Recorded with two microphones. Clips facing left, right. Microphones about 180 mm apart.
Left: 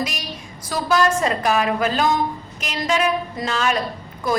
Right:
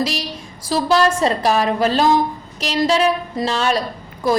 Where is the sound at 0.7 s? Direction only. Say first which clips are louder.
Right 3 dB; 30° right (ahead or behind).